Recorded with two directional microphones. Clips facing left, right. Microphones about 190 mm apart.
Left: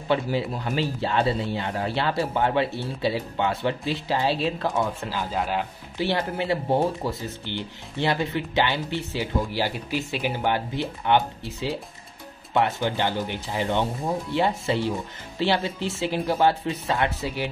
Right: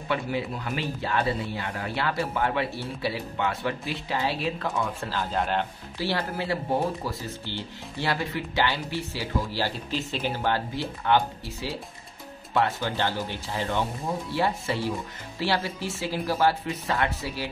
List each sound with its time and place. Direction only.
0.1 s speech: 30° left (ahead or behind)
5.0 s speech: 10° left (ahead or behind)
5.9 s speech: 20° left (ahead or behind)